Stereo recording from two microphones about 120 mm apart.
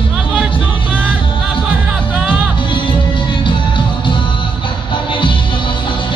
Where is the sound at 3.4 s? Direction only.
45° left (ahead or behind).